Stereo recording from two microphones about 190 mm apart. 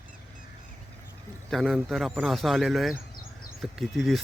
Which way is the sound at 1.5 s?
Centre (ahead or behind).